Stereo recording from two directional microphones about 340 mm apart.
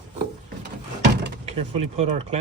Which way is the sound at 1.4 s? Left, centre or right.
Centre.